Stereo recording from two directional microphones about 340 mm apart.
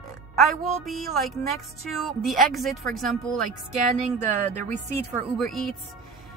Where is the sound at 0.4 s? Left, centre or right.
Centre.